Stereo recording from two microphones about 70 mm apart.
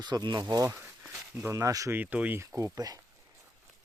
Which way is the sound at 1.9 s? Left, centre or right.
Right.